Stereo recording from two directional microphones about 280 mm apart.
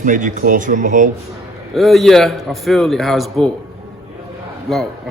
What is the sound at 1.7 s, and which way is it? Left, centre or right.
Speech, centre.